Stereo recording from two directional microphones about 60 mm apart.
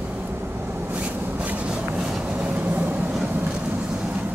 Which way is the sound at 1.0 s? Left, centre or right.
Right.